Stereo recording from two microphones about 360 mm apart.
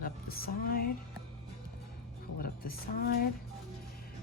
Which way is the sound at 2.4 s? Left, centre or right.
Left.